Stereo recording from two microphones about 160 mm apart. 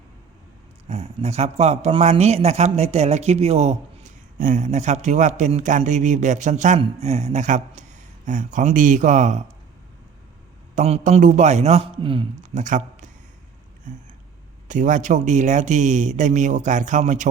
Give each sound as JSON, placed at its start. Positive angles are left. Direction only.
{"t": 0.9, "sound": "speech", "side_deg": -40}
{"t": 4.4, "sound": "speech", "side_deg": -50}
{"t": 6.7, "sound": "speech", "side_deg": -40}
{"t": 10.8, "sound": "speech", "side_deg": -45}
{"t": 12.4, "sound": "speech", "side_deg": -50}